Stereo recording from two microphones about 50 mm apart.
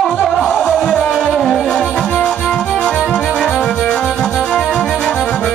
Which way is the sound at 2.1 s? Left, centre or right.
Left.